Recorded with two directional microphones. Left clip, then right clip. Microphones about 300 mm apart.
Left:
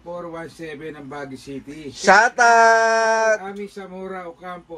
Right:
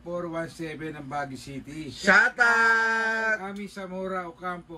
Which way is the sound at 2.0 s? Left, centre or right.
Left.